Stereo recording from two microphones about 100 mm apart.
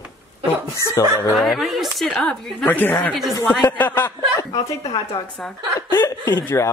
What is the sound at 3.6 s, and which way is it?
Speech, 20° left (ahead or behind).